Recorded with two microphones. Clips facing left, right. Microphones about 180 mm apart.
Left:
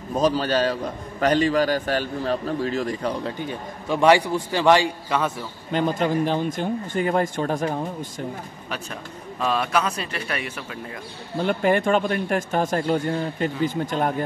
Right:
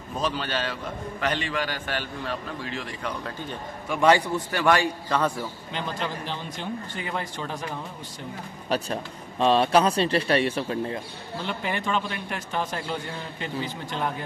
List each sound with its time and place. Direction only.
0.1 s a man's voice: 40° left (ahead or behind)
4.5 s a man's voice: 20° left (ahead or behind)
5.7 s a man's voice: 45° left (ahead or behind)
8.6 s speech: 35° right (ahead or behind)
11.4 s a man's voice: 50° left (ahead or behind)